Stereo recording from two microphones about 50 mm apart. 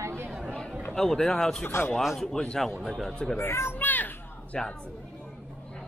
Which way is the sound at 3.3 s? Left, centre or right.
Left.